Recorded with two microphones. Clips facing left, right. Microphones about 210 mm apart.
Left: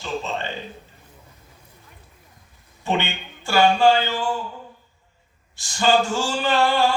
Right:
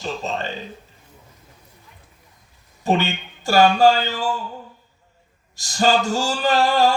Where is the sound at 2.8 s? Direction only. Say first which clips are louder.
Right 4 dB; 40° right (ahead or behind).